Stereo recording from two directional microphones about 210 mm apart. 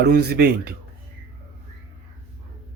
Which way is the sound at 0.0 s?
50° right (ahead or behind).